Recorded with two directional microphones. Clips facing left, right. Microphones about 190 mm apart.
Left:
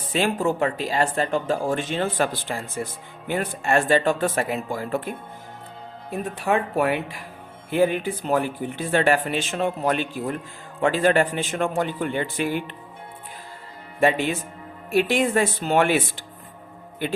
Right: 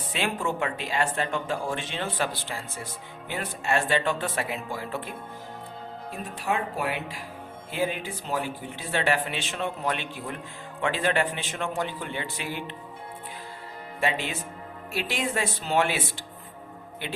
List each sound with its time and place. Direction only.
0.1 s speech: 40° left (ahead or behind)
6.1 s speech: 60° left (ahead or behind)
14.0 s speech: 50° left (ahead or behind)